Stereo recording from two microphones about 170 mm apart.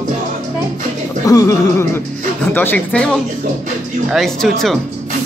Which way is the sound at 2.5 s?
10° left (ahead or behind).